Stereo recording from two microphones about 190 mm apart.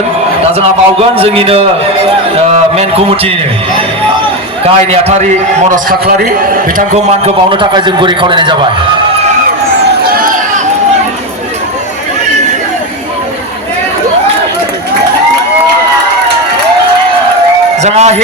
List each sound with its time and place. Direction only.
0.5 s a man's voice: 30° right (ahead or behind)
4.6 s speech: 30° right (ahead or behind)
5.7 s a man's voice: 45° right (ahead or behind); by 8.5 s 25° right (ahead or behind)
10.2 s a sound: 45° right (ahead or behind)
17.7 s a man's voice: 35° right (ahead or behind)